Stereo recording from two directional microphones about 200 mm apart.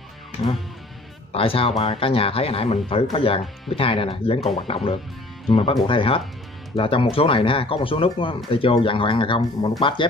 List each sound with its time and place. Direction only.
1.3 s speech: 25° left (ahead or behind)